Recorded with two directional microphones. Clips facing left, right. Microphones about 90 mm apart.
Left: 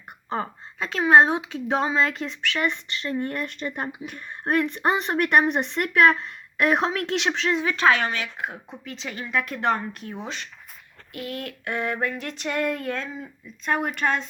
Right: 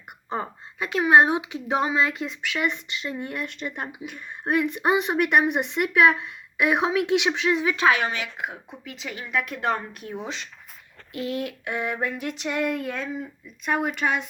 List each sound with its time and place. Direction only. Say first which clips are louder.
0.4 s speech: even; 15° right (ahead or behind)